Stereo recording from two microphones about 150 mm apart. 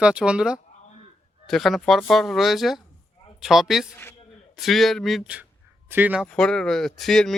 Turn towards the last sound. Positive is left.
turn(degrees=5)  # may be behind; listen again after turning